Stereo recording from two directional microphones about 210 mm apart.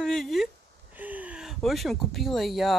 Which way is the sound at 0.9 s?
10° right (ahead or behind).